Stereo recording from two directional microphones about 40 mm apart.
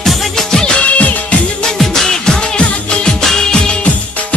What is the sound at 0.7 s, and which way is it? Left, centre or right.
Music, left.